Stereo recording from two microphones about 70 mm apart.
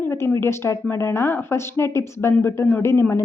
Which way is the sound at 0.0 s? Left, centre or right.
Left.